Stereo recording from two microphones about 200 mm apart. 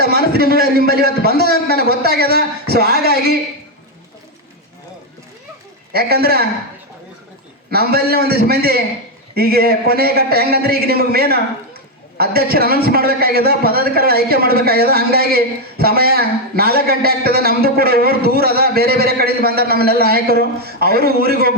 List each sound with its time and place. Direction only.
0.0 s a man's voice: 50° right (ahead or behind)
5.9 s a man's voice: 50° right (ahead or behind)
7.7 s a man's voice: 50° right (ahead or behind)